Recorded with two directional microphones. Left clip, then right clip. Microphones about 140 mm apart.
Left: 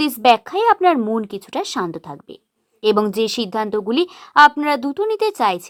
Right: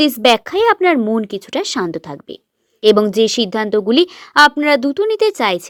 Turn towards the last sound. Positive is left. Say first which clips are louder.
# right 3 dB
turn(degrees=-25)  # may be behind; listen again after turning